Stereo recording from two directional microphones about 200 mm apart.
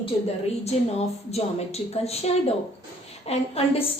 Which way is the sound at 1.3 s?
30° left (ahead or behind).